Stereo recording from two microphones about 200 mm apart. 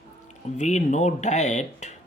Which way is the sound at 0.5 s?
35° left (ahead or behind).